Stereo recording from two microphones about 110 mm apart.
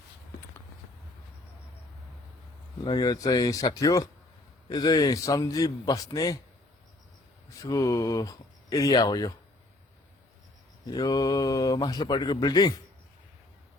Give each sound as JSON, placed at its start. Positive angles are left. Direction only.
{"t": 2.8, "sound": "speech", "side_deg": 35}
{"t": 7.5, "sound": "speech", "side_deg": 30}
{"t": 10.8, "sound": "speech", "side_deg": 35}